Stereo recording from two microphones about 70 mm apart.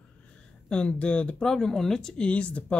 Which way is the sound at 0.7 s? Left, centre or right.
Centre.